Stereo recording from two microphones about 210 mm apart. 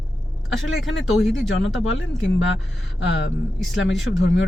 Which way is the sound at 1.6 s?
60° left (ahead or behind).